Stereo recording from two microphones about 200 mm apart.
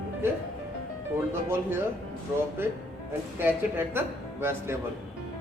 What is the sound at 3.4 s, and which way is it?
A man's voice, 10° right (ahead or behind).